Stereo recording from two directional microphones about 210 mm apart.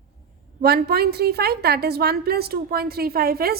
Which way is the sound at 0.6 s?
50° right (ahead or behind).